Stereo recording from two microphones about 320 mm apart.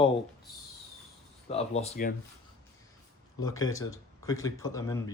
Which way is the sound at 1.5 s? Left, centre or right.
Centre.